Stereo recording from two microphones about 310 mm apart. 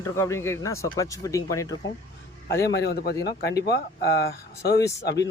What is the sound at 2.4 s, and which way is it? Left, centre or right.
A man's voice, left.